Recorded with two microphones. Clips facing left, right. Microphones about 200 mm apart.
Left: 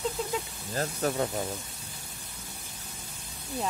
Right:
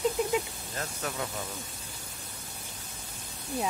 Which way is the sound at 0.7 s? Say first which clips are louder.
Left 7 dB; 35° left (ahead or behind).